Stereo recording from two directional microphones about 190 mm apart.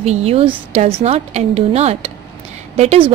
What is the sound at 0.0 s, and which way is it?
A woman's voice, 35° right (ahead or behind).